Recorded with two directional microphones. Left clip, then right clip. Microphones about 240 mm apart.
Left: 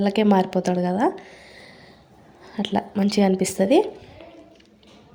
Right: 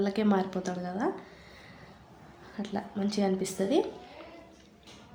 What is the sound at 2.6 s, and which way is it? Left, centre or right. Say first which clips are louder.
Speech: left 11 dB; left.